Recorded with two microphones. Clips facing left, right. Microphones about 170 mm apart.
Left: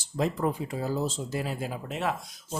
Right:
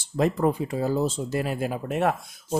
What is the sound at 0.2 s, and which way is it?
Speech, 60° right (ahead or behind).